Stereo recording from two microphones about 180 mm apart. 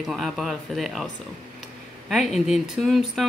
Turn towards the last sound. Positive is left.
turn(degrees=0)  # may be behind; listen again after turning